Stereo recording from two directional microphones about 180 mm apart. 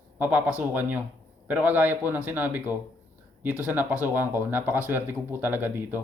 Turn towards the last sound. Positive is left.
turn(degrees=-10)  # may be behind; listen again after turning